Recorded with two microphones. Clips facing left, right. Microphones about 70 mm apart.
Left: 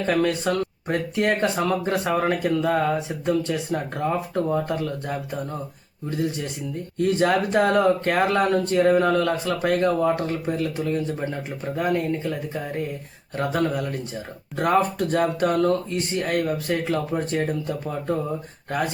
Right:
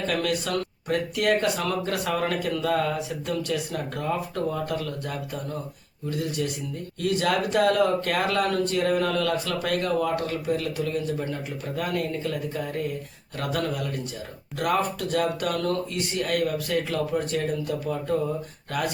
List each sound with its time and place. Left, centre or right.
0.0 s speech: left